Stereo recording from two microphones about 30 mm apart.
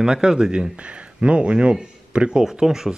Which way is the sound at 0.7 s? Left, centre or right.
Right.